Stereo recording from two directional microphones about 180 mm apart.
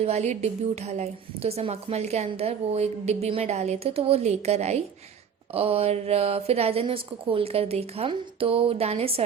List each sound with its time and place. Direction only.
0.0 s a woman's voice: 35° right (ahead or behind)